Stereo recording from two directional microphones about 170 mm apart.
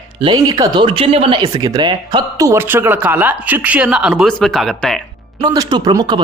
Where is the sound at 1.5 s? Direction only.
20° right (ahead or behind); by 5.0 s centre (ahead or behind).